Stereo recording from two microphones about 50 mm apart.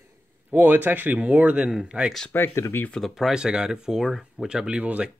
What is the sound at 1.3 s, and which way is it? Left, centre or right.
Speech, right.